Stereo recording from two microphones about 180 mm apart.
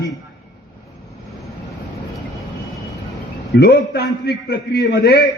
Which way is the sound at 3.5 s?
65° left (ahead or behind).